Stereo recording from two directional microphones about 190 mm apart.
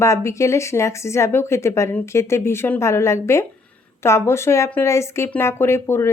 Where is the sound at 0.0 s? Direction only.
15° left (ahead or behind).